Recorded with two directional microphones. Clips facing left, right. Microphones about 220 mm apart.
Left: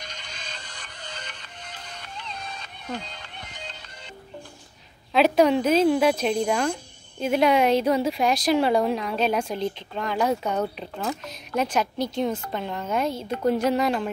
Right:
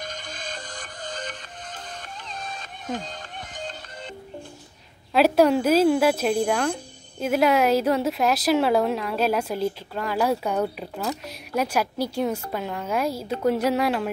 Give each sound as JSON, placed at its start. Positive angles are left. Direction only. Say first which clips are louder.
{"t": 0.0, "sound": "music", "louder": "right 6 dB", "side_deg": -50}
{"t": 5.1, "sound": "a woman's voice", "louder": "right 1 dB", "side_deg": -5}